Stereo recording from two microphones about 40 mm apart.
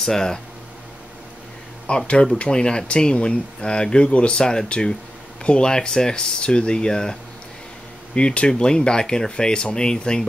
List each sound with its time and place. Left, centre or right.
0.0 s speech: centre
1.9 s speech: left
2.5 s speech: left